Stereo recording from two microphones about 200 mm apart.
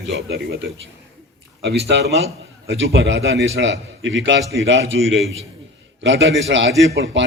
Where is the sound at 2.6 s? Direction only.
70° right (ahead or behind).